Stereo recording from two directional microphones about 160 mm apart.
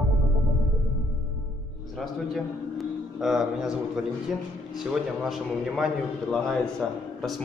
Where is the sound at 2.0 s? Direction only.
Centre (ahead or behind).